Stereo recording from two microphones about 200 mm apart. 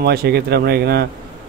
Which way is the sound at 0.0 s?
50° right (ahead or behind).